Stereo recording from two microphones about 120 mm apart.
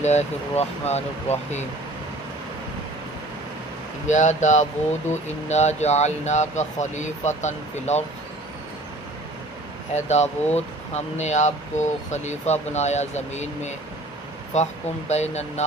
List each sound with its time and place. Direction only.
0.0 s speech: 70° left (ahead or behind)
4.0 s speech: 80° left
5.1 s speech: 70° left (ahead or behind)
9.9 s speech: 65° left (ahead or behind)